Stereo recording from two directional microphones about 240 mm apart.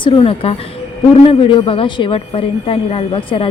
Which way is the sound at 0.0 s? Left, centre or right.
Left.